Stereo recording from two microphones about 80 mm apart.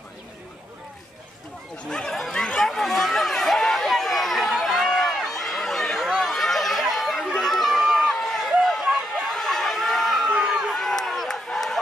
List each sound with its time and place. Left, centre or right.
1.9 s chatter: centre
7.3 s run: centre
8.8 s a sound: centre
10.8 s run: centre